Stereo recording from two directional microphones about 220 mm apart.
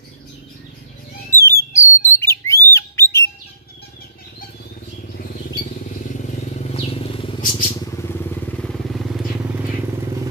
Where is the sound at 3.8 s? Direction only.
45° left (ahead or behind).